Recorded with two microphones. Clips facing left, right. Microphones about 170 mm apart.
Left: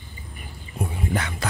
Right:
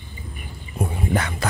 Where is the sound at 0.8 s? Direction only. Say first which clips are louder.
Right 3 dB; 50° right (ahead or behind).